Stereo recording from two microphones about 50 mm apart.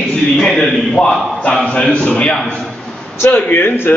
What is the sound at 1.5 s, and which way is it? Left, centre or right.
Speech, left.